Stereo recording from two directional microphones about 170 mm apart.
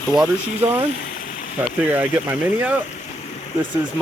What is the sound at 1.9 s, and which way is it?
Speech, 10° right (ahead or behind).